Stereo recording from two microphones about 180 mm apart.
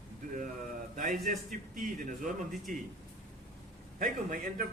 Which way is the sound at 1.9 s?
45° right (ahead or behind).